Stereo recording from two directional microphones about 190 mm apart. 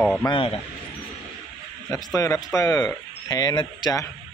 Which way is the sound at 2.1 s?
15° left (ahead or behind).